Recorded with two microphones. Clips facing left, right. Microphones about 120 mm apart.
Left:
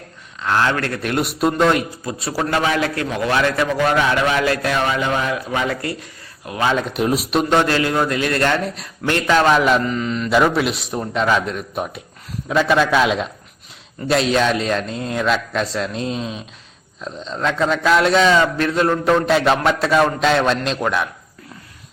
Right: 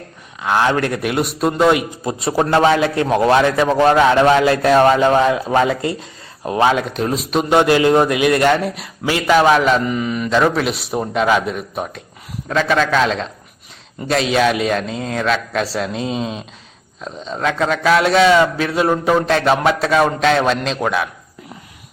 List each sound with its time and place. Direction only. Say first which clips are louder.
0.4 s a man's voice: right 3 dB; 15° right (ahead or behind)
1.1 s a man's voice: left 3 dB; centre (ahead or behind)
2.0 s a man's voice: right 9 dB; 25° right (ahead or behind)
3.4 s a man's voice: right 3 dB; 20° right (ahead or behind)
3.7 s speech: right 5 dB; 35° right (ahead or behind)
4.7 s speech: right 8 dB; 45° right (ahead or behind)
5.6 s a man's voice: right 4 dB; 20° right (ahead or behind)
6.9 s a man's voice: even; 10° left (ahead or behind)
7.5 s a man's voice: right 7 dB; 15° right (ahead or behind); by 9.8 s centre (ahead or behind)
9.8 s a man's voice: right 2 dB; 15° right (ahead or behind)
10.2 s a man's voice: even; 5° left (ahead or behind)